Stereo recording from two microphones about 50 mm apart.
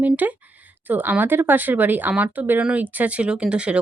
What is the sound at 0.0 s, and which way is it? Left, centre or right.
Speech, right.